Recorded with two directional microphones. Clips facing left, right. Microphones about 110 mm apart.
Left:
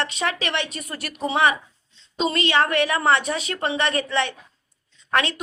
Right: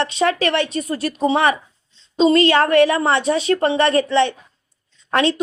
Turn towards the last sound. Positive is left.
turn(degrees=-30)  # may be behind; listen again after turning